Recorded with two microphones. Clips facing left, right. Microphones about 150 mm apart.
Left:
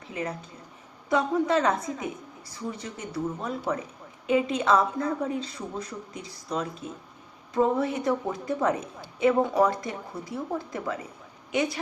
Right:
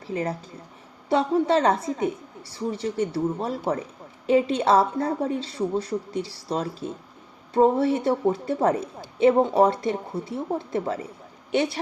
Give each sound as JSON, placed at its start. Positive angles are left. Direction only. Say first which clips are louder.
{"t": 0.1, "sound": "a woman's voice", "louder": "right 5 dB", "side_deg": -35}